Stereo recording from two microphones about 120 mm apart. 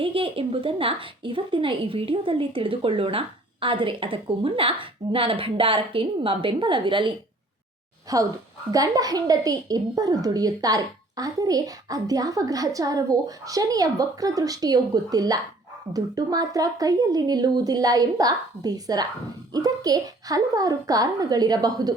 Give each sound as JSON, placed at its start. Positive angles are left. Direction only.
{"t": 0.0, "sound": "speech", "side_deg": -50}
{"t": 8.1, "sound": "a woman's voice", "side_deg": -30}